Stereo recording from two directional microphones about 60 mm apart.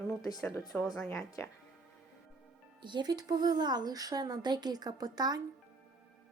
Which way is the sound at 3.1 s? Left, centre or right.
Right.